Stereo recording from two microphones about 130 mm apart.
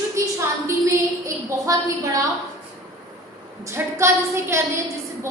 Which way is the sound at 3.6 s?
20° right (ahead or behind).